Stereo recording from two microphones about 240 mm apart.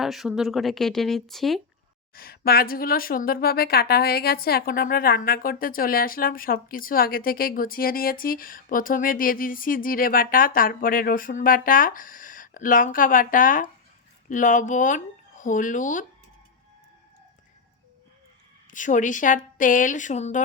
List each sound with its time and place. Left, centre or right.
0.0 s speech: centre
2.1 s speech: left
18.7 s speech: left